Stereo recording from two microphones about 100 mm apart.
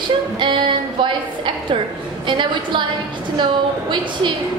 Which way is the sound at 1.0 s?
55° right (ahead or behind).